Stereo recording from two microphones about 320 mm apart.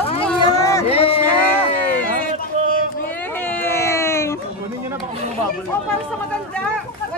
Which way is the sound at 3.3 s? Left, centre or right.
Centre.